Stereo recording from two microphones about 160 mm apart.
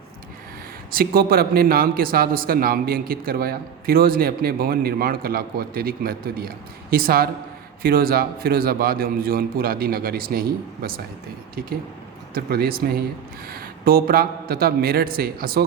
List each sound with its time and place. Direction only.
0.9 s a man's voice: 65° right (ahead or behind)
12.3 s a man's voice: 70° right (ahead or behind)